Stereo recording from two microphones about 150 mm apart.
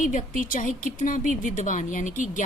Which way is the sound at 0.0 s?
60° left (ahead or behind).